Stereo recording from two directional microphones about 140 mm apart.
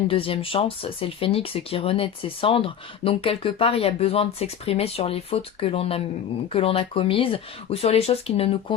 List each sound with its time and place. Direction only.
0.1 s speech: 40° left (ahead or behind)